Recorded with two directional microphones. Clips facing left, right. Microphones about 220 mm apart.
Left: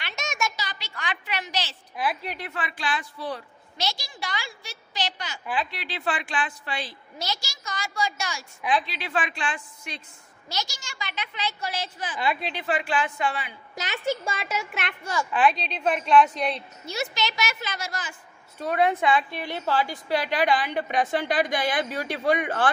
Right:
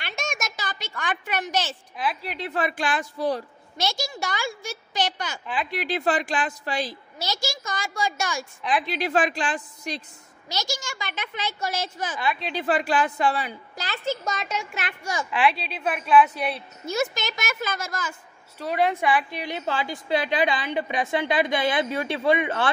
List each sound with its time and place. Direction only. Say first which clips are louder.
0.0 s a sound: left 1 dB; 50° right (ahead or behind)
2.5 s a woman's voice: right 7 dB; 45° right (ahead or behind)
13.7 s a woman's voice: left 1 dB; 15° left (ahead or behind); by 15.0 s centre (ahead or behind)
15.0 s a woman's voice: left 1 dB; 10° right (ahead or behind)
16.8 s a woman's voice: right 4 dB; 50° right (ahead or behind)
18.9 s a woman's voice: even; 15° right (ahead or behind)